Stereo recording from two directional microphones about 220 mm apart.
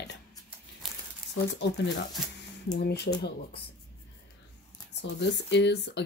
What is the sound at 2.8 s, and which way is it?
Speech, 45° left (ahead or behind).